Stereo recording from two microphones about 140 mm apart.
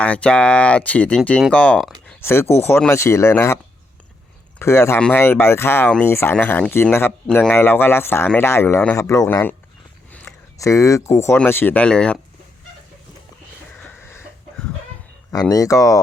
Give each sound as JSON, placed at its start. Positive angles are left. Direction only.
{"t": 0.0, "sound": "speech", "side_deg": 10}
{"t": 4.6, "sound": "speech", "side_deg": 20}
{"t": 4.9, "sound": "speech", "side_deg": 5}
{"t": 5.2, "sound": "speech", "side_deg": 20}
{"t": 13.7, "sound": "a sound", "side_deg": 10}
{"t": 15.3, "sound": "speech", "side_deg": 25}